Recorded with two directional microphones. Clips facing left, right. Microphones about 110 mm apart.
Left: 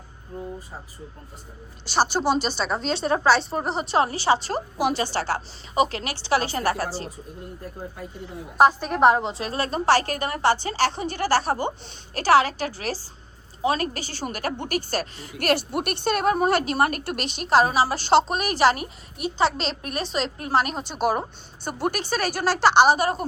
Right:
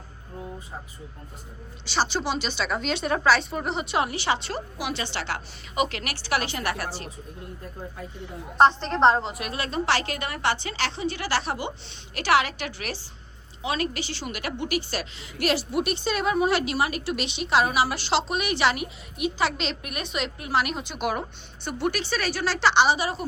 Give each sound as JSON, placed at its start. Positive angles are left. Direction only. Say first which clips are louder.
{"t": 1.8, "sound": "a woman's voice", "louder": "left 4 dB", "side_deg": 45}
{"t": 2.0, "sound": "speech", "louder": "left 5 dB", "side_deg": 5}
{"t": 2.6, "sound": "a woman's voice", "louder": "left 2 dB", "side_deg": 30}
{"t": 8.5, "sound": "a woman's voice", "louder": "left 1 dB", "side_deg": 10}
{"t": 9.3, "sound": "a woman's voice", "louder": "left 3 dB", "side_deg": 30}